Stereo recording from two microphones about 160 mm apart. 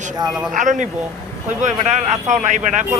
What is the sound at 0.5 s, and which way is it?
Speech, 50° right (ahead or behind).